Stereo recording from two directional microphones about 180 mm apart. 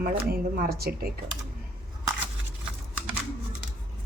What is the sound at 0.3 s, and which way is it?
Speech, 55° right (ahead or behind).